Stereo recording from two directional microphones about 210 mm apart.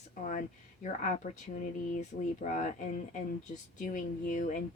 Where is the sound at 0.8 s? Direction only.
35° left (ahead or behind).